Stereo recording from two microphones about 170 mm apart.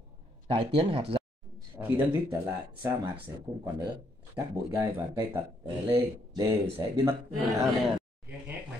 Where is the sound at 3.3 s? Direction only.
15° right (ahead or behind).